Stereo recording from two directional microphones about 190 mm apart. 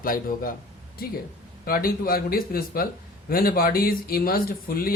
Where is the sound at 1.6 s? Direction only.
50° left (ahead or behind).